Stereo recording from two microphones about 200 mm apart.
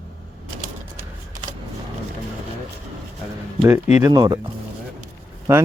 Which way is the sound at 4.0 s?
20° right (ahead or behind).